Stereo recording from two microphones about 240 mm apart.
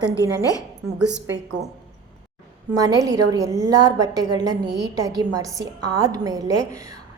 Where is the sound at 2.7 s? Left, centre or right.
Centre.